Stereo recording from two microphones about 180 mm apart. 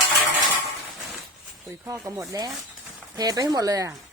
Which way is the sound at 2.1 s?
15° right (ahead or behind).